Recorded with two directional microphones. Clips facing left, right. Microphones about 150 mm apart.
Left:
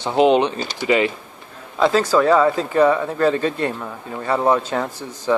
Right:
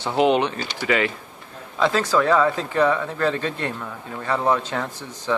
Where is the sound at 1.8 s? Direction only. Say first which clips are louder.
Left 4 dB; 5° left (ahead or behind).